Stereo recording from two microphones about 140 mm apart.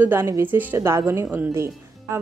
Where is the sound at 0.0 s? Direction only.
15° right (ahead or behind).